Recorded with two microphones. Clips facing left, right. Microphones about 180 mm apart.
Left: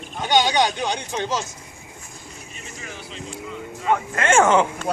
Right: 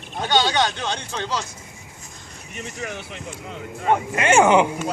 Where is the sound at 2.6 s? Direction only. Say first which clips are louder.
Right 8 dB; 65° right (ahead or behind).